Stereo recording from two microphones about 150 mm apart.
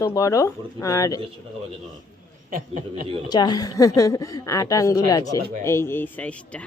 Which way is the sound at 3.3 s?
25° left (ahead or behind).